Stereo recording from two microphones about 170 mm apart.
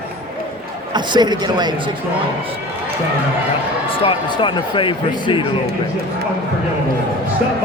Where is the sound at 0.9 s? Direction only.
25° right (ahead or behind).